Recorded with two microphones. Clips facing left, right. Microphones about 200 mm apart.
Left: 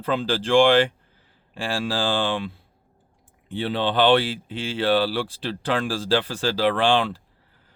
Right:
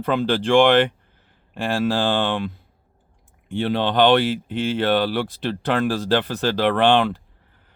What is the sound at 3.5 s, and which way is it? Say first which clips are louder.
Speech: right 3 dB; 50° right (ahead or behind).